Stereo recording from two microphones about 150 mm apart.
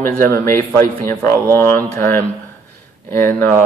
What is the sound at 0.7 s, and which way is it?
A man's voice, 20° left (ahead or behind).